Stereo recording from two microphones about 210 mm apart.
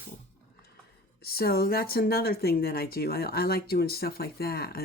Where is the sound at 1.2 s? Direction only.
45° left (ahead or behind).